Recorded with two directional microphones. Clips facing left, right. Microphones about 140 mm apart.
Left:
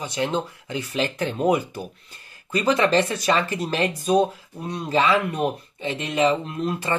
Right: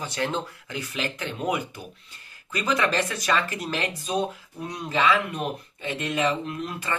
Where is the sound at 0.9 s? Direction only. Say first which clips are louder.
Left 7 dB; 35° left (ahead or behind).